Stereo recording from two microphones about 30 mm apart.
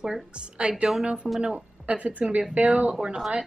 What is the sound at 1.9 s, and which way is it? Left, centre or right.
A woman's voice, right.